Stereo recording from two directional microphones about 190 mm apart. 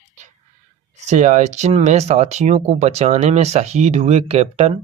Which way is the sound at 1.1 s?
40° right (ahead or behind).